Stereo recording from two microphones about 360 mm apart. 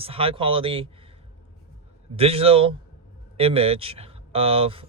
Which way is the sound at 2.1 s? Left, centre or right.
Centre.